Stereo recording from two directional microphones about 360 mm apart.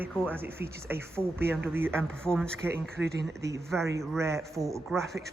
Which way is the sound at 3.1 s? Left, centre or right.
Right.